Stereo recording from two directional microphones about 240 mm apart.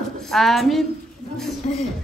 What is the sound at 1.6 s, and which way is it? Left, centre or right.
Music, left.